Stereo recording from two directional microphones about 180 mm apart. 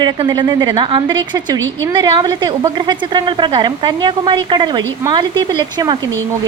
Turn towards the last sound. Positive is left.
turn(degrees=-25)  # may be behind; listen again after turning